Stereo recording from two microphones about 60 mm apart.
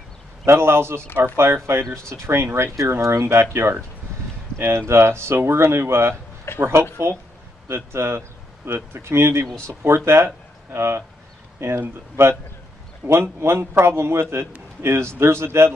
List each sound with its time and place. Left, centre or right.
0.5 s speech: right
4.6 s speech: right